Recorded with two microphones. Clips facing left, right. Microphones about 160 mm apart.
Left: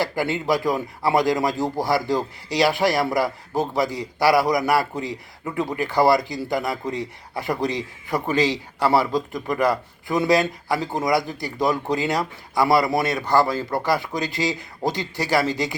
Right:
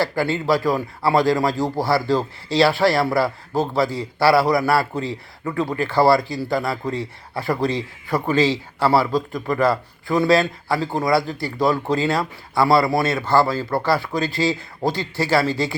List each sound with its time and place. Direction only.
0.0 s a man's voice: 20° left (ahead or behind)